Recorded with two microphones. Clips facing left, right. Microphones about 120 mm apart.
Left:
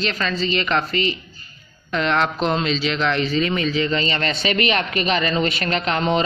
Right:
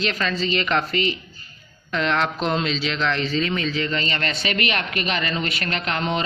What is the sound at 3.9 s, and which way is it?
Speech, 25° left (ahead or behind).